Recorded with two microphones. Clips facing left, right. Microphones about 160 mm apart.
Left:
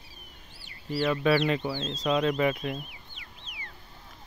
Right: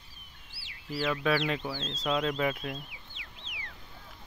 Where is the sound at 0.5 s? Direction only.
90° right.